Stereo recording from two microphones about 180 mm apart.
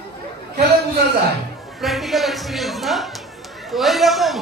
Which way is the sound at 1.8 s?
Centre (ahead or behind).